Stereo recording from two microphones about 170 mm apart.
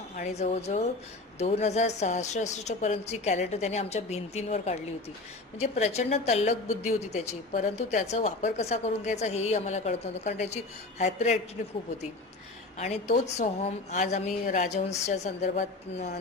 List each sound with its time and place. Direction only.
0.3 s a woman's voice: 40° left (ahead or behind)
12.8 s a woman's voice: 40° left (ahead or behind)